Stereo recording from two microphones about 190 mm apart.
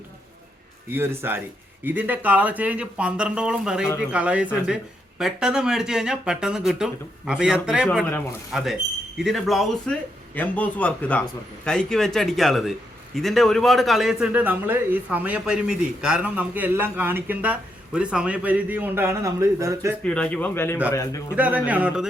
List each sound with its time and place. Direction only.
0.9 s a man's voice: 10° right (ahead or behind)
20.1 s speech: 5° left (ahead or behind)
21.3 s a man's voice: 5° right (ahead or behind)